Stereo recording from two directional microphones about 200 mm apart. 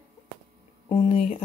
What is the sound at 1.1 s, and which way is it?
Speech, 30° left (ahead or behind).